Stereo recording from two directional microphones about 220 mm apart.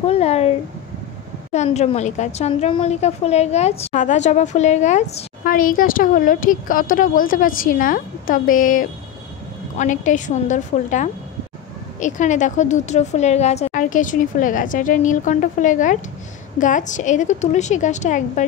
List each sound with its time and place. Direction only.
0.0 s a woman's voice: 30° left (ahead or behind)